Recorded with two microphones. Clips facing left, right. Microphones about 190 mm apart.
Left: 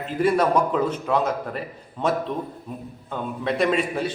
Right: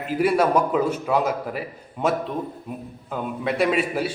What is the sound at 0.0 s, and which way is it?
A man's voice, 10° right (ahead or behind).